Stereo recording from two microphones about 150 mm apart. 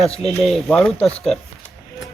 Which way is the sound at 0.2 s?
Centre (ahead or behind).